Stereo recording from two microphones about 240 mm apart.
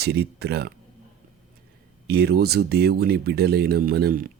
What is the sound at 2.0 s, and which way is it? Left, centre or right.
Speech, right.